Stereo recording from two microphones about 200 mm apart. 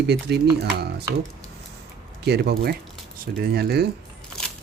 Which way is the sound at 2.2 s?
55° right (ahead or behind).